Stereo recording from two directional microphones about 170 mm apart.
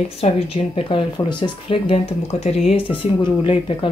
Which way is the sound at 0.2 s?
35° left (ahead or behind).